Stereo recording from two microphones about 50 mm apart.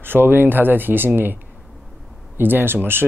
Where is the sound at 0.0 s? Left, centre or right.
Right.